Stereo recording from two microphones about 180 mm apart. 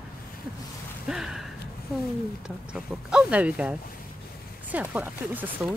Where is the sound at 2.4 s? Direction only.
5° right (ahead or behind).